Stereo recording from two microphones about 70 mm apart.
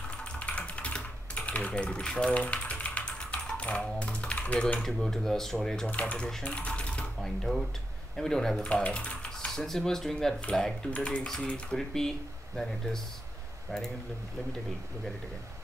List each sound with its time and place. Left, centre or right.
0.2 s typing: centre
4.7 s speech: centre
5.9 s speech: centre
6.4 s coin: centre
7.2 s speech: centre
8.6 s typing: centre
9.5 s speech: centre
10.9 s speech: centre